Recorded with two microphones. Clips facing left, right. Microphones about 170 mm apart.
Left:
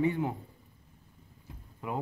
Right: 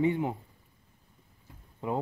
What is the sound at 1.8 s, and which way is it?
Speech, 25° right (ahead or behind).